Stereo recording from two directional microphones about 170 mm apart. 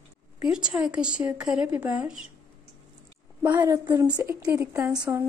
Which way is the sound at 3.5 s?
25° right (ahead or behind).